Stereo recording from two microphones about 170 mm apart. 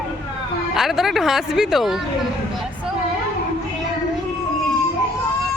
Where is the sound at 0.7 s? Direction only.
Centre (ahead or behind).